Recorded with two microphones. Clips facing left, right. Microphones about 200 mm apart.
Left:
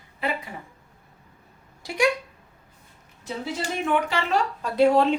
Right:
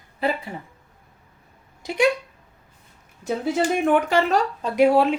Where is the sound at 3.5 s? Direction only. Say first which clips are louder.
Right 5 dB; 50° right (ahead or behind).